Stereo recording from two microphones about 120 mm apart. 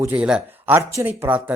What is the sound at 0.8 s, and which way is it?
Speech, 25° right (ahead or behind).